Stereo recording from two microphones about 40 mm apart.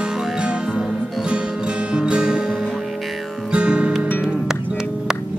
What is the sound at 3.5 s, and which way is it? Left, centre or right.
Music, right.